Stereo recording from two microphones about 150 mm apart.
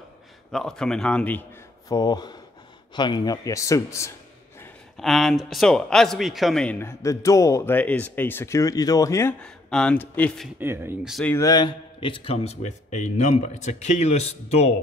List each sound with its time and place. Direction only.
0.5 s speech: 5° left (ahead or behind)
1.9 s a man's voice: 25° left (ahead or behind)
4.9 s a man's voice: centre (ahead or behind); by 9.3 s 20° left (ahead or behind)
9.4 s speech: 5° left (ahead or behind)
10.6 s speech: 15° right (ahead or behind)
11.2 s a man's voice: 20° left (ahead or behind); by 14.3 s 45° left (ahead or behind)